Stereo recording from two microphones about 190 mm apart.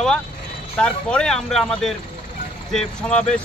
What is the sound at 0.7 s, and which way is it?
Speech, 5° left (ahead or behind).